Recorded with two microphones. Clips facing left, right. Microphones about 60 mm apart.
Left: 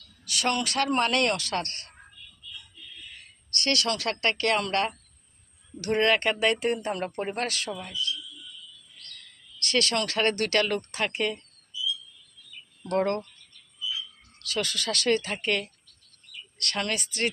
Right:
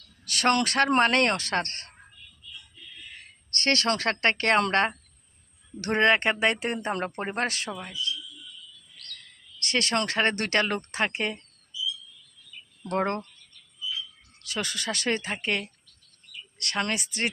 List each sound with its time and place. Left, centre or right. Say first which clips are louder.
0.3 s a sound: right 4 dB; right
0.6 s speech: right 4 dB; right
3.1 s speech: right 1 dB; right; by 7.9 s centre
9.6 s speech: even; right
12.9 s speech: left 1 dB; right
14.4 s speech: left 1 dB; right